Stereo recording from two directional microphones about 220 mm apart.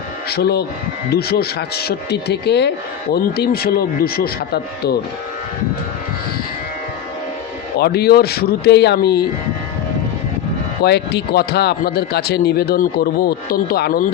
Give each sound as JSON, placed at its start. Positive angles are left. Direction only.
{"t": 0.3, "sound": "speech", "side_deg": 45}
{"t": 7.8, "sound": "speech", "side_deg": 45}
{"t": 10.8, "sound": "speech", "side_deg": 50}